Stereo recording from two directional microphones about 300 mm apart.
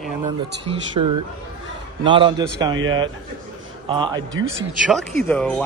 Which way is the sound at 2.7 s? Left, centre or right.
Right.